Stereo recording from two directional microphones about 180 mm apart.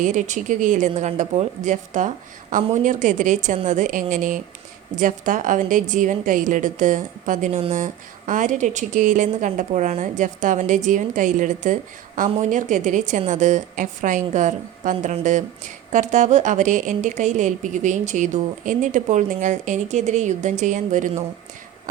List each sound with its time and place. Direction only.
0.0 s speech: 45° right (ahead or behind)